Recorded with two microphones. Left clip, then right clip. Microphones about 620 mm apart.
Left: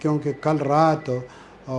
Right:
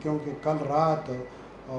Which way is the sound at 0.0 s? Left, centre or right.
Left.